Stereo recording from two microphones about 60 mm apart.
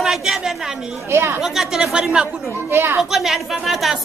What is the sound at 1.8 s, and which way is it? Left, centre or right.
Speech, centre.